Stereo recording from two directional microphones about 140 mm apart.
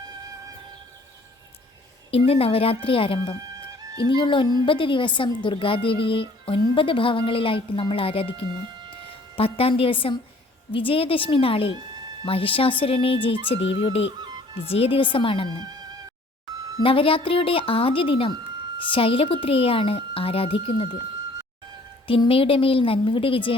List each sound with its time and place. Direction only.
2.0 s a woman's voice: 45° left (ahead or behind)
9.3 s a woman's voice: 40° left (ahead or behind)
14.2 s music: 30° right (ahead or behind)
14.6 s a woman's voice: 45° left (ahead or behind)
16.8 s a woman's voice: 40° left (ahead or behind)
22.0 s a woman's voice: 40° left (ahead or behind)